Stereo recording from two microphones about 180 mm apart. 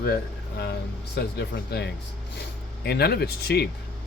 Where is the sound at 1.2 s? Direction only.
65° left (ahead or behind).